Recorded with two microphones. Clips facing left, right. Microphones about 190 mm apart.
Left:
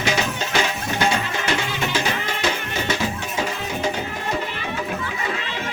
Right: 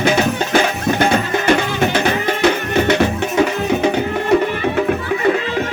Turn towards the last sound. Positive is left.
turn(degrees=-65)  # may be behind; listen again after turning